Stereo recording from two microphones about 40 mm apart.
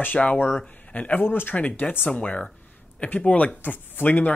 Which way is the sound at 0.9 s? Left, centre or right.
Left.